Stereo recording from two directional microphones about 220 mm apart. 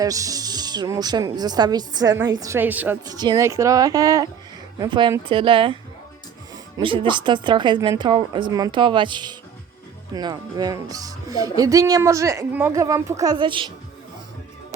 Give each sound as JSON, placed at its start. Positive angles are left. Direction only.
{"t": 0.0, "sound": "a woman's voice", "side_deg": -15}
{"t": 6.7, "sound": "a woman's voice", "side_deg": -25}